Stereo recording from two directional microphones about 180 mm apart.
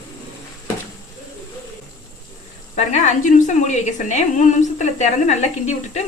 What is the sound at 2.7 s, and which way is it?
A woman's voice, 40° left (ahead or behind).